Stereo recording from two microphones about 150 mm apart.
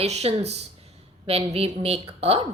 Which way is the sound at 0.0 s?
45° right (ahead or behind).